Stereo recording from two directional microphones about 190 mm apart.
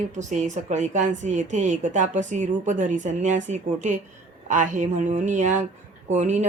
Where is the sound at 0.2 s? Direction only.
40° right (ahead or behind).